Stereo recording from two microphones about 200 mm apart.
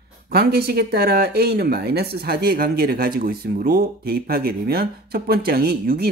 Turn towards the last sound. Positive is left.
turn(degrees=-50)  # may be behind; listen again after turning